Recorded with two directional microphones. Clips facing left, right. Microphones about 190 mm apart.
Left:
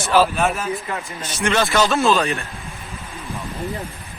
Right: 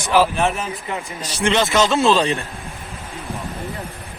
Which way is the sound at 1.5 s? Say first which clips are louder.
Right 1 dB; 20° right (ahead or behind).